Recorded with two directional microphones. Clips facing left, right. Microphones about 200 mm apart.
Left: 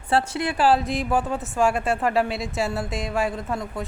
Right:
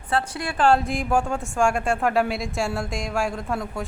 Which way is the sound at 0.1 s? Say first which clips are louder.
Left 3 dB; 25° left (ahead or behind).